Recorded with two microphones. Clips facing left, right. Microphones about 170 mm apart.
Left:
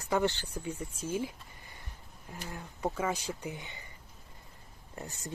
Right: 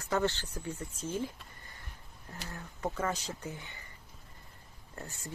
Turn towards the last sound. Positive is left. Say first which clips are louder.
# left 2 dB
turn(degrees=20)  # may be behind; listen again after turning